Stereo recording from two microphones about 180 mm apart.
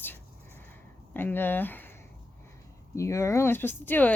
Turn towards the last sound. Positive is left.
turn(degrees=10)  # may be behind; listen again after turning